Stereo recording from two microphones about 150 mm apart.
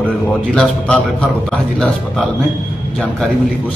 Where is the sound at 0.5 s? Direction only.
10° left (ahead or behind).